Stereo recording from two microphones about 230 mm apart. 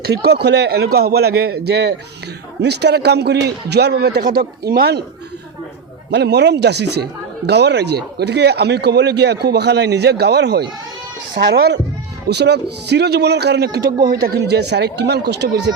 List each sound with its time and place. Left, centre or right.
0.0 s speech: right
6.1 s speech: right